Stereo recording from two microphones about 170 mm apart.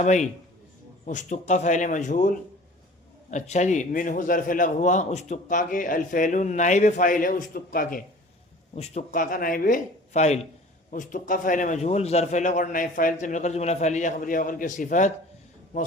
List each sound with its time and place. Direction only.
0.0 s a man's voice: 45° left (ahead or behind)
3.3 s a man's voice: 45° left (ahead or behind)
8.7 s a man's voice: 40° left (ahead or behind)